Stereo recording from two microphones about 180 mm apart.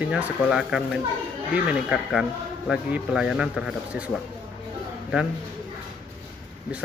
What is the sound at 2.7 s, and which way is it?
Speech, 5° right (ahead or behind).